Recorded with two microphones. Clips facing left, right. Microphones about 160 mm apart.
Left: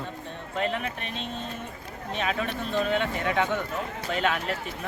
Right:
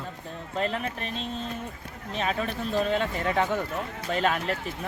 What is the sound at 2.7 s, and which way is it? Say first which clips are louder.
Speech: even; 35° right (ahead or behind).